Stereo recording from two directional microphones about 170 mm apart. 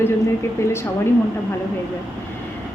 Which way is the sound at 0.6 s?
15° left (ahead or behind).